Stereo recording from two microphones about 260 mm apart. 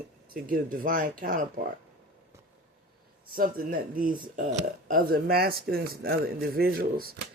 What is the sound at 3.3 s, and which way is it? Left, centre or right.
Speech, right.